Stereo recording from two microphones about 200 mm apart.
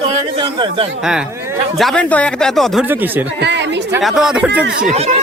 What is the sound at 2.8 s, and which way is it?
Speech, 10° right (ahead or behind).